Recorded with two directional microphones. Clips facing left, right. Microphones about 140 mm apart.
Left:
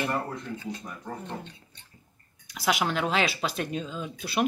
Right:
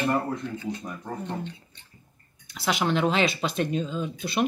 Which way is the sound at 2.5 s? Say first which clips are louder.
Right 2 dB; 10° left (ahead or behind).